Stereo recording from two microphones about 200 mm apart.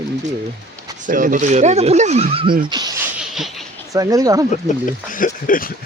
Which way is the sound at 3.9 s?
15° right (ahead or behind).